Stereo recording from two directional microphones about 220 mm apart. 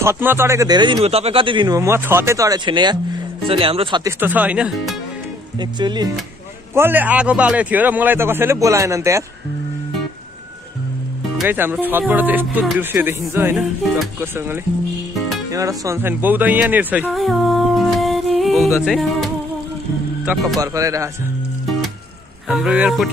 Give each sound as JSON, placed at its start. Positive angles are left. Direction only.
{"t": 0.0, "sound": "speech", "side_deg": -10}
{"t": 4.2, "sound": "speech", "side_deg": -10}
{"t": 5.6, "sound": "speech", "side_deg": -20}
{"t": 6.7, "sound": "speech", "side_deg": -10}
{"t": 11.3, "sound": "speech", "side_deg": -10}
{"t": 18.9, "sound": "music", "side_deg": 0}
{"t": 20.5, "sound": "speech", "side_deg": -15}
{"t": 22.5, "sound": "speech", "side_deg": -5}